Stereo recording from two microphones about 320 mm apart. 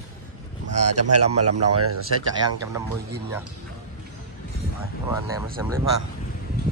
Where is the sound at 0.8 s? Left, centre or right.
Right.